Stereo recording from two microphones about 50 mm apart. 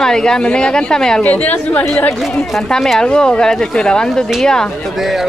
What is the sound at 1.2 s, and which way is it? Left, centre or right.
Speech, left.